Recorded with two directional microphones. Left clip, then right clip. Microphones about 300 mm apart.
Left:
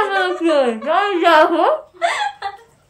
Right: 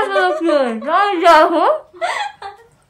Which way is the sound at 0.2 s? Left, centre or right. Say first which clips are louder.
Right 3 dB; centre.